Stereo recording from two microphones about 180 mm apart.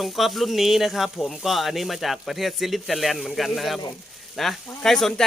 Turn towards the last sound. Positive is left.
turn(degrees=0)  # may be behind; listen again after turning